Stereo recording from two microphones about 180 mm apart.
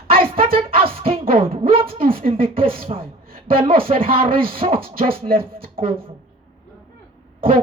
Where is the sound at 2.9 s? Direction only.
35° right (ahead or behind).